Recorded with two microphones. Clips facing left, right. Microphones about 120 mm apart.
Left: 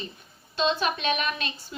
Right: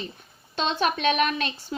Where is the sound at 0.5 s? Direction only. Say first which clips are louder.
Right 1 dB; 60° right (ahead or behind).